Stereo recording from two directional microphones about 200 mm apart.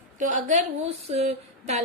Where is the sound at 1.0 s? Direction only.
30° right (ahead or behind).